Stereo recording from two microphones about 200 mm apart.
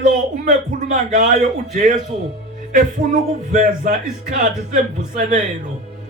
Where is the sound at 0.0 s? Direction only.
40° right (ahead or behind).